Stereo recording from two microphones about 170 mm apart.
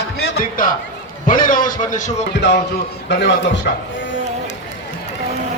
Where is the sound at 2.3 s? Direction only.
90° left.